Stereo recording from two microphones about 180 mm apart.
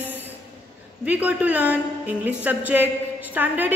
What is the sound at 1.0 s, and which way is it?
A woman's voice, 10° right (ahead or behind).